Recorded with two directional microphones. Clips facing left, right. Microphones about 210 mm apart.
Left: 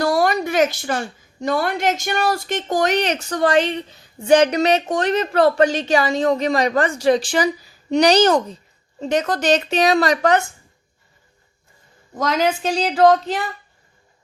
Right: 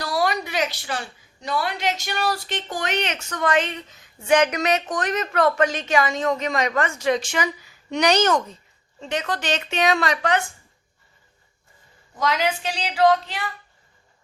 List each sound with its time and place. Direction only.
0.0 s a woman's voice: 50° left (ahead or behind)
12.1 s a woman's voice: 45° left (ahead or behind)